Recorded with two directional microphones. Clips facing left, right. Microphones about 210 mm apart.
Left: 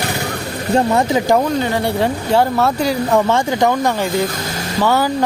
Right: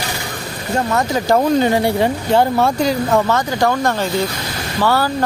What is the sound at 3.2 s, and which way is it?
Speech, 20° left (ahead or behind).